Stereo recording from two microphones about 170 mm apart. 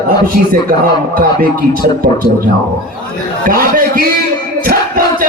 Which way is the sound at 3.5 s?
55° right (ahead or behind).